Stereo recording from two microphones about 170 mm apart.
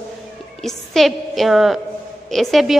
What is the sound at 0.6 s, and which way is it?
A woman's voice, centre (ahead or behind).